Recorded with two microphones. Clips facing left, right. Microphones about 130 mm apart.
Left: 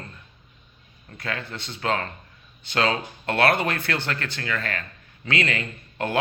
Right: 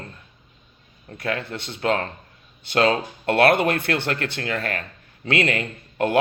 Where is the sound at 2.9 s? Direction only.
30° right (ahead or behind).